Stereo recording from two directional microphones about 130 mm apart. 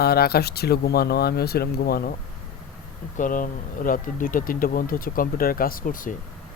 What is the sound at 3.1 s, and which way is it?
Speech, 90° left.